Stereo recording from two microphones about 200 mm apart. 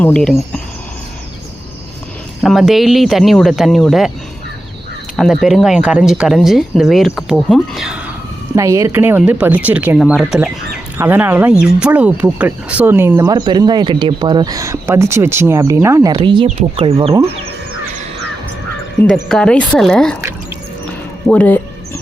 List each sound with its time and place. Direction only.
0.0 s speech: 5° left (ahead or behind)
2.4 s speech: centre (ahead or behind)
5.1 s speech: centre (ahead or behind)
16.1 s speech: 25° right (ahead or behind)
19.0 s speech: 5° left (ahead or behind)
21.2 s speech: 5° left (ahead or behind)